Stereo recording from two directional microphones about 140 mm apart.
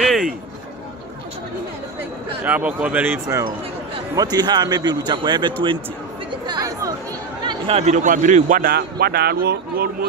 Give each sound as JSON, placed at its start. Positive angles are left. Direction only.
{"t": 0.0, "sound": "a sound", "side_deg": 0}
{"t": 2.4, "sound": "a man's voice", "side_deg": -10}
{"t": 6.4, "sound": "chatter", "side_deg": -30}
{"t": 7.4, "sound": "chatter", "side_deg": -40}
{"t": 7.8, "sound": "a man's voice", "side_deg": -60}